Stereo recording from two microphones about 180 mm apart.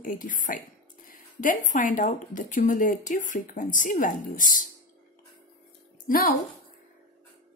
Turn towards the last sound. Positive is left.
turn(degrees=50)  # may be behind; listen again after turning